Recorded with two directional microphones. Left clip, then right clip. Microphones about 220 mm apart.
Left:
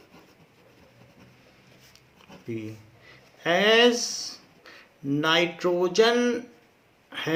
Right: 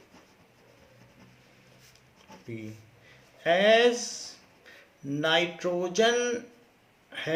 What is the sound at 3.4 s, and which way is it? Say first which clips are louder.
Speech: left 2 dB; 35° left (ahead or behind).